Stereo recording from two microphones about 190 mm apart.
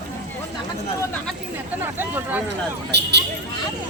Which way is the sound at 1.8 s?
10° right (ahead or behind).